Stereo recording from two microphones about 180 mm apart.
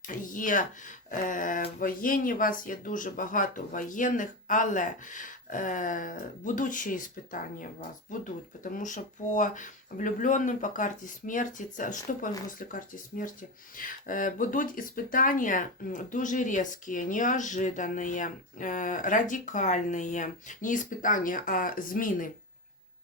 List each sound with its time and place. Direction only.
0.1 s speech: 45° left (ahead or behind)